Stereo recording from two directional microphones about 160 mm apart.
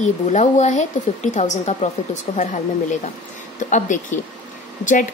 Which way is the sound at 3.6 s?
50° left (ahead or behind).